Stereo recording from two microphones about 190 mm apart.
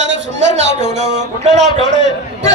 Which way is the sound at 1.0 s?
35° right (ahead or behind).